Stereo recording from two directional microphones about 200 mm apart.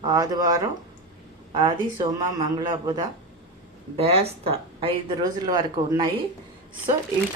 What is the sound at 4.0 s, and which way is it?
Speech, 30° right (ahead or behind).